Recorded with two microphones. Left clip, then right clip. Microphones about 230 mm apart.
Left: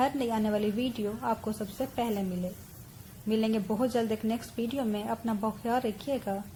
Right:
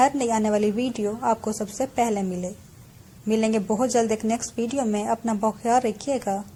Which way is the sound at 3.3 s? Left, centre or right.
Right.